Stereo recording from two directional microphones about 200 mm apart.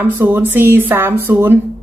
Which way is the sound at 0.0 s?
10° right (ahead or behind).